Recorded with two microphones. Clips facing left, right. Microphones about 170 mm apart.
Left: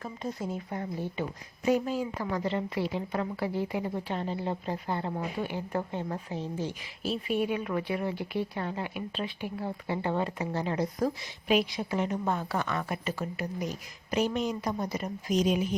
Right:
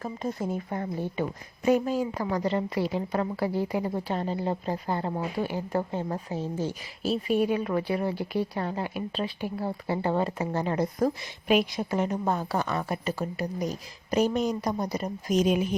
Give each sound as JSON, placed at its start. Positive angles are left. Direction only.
{"t": 0.0, "sound": "a woman's voice", "side_deg": -50}
{"t": 15.4, "sound": "speech", "side_deg": -55}